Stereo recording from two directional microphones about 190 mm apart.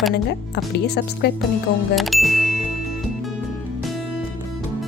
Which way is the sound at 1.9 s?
Centre (ahead or behind).